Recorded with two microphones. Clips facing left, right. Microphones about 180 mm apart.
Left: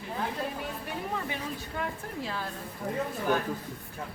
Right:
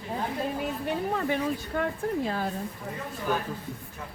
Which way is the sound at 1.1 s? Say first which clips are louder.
Right 7 dB; 50° right (ahead or behind).